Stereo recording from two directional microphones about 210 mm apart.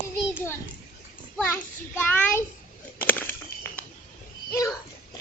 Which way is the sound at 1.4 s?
10° left (ahead or behind).